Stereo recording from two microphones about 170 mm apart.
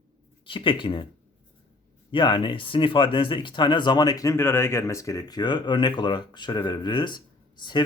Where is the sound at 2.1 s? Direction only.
30° left (ahead or behind).